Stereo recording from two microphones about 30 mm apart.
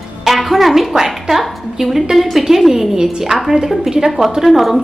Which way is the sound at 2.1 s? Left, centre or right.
Centre.